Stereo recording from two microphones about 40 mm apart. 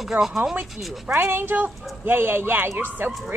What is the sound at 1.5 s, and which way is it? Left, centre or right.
Speech, right.